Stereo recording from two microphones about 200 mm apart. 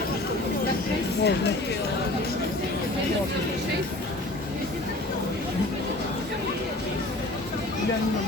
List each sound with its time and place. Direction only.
1.2 s speech: 55° left (ahead or behind)